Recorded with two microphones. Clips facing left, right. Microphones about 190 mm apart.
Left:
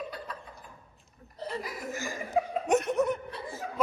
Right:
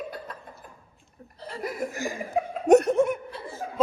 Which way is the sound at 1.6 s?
55° right (ahead or behind).